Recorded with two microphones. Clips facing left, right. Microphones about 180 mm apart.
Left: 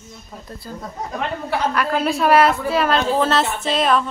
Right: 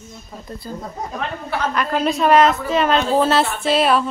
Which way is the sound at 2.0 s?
5° left (ahead or behind).